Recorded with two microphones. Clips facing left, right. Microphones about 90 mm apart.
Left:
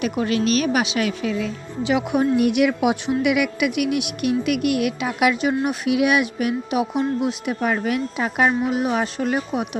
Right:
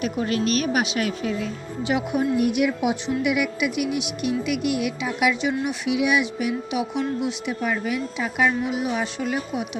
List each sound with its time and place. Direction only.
0.0 s a woman's voice: 90° left; by 9.6 s 45° left (ahead or behind)